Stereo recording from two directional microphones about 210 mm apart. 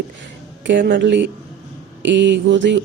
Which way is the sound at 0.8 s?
45° right (ahead or behind).